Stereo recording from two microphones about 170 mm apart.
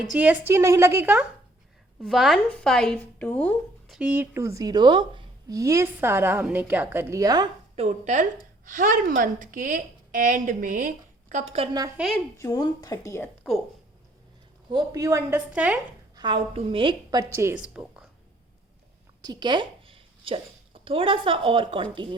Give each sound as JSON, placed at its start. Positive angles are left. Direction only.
{"t": 0.1, "sound": "a woman's voice", "side_deg": -10}
{"t": 3.9, "sound": "a woman's voice", "side_deg": -10}
{"t": 7.8, "sound": "a woman's voice", "side_deg": -45}
{"t": 11.9, "sound": "speech", "side_deg": 0}
{"t": 12.4, "sound": "speech", "side_deg": 20}
{"t": 14.7, "sound": "a woman's voice", "side_deg": -25}
{"t": 15.5, "sound": "a woman's voice", "side_deg": -10}
{"t": 16.1, "sound": "a woman's voice", "side_deg": -25}
{"t": 19.2, "sound": "speech", "side_deg": -25}